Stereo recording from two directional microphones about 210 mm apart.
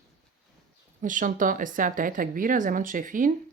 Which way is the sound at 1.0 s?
40° right (ahead or behind).